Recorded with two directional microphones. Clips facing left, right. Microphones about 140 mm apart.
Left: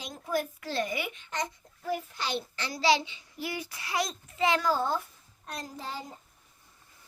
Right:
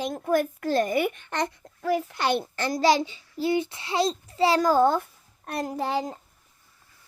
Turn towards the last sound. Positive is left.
turn(degrees=-70)  # may be behind; listen again after turning